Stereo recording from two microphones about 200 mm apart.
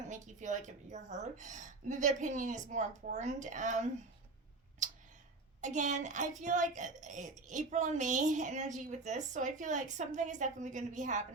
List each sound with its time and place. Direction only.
0.1 s a woman's voice: 35° right (ahead or behind)
5.5 s a woman's voice: 40° right (ahead or behind)